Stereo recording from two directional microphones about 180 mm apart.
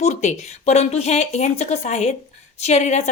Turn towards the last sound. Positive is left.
turn(degrees=40)  # may be behind; listen again after turning